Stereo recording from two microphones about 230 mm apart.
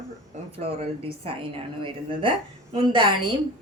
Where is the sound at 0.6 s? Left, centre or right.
Right.